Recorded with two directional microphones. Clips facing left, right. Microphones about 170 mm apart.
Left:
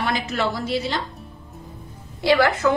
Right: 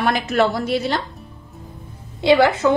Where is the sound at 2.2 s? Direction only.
20° right (ahead or behind).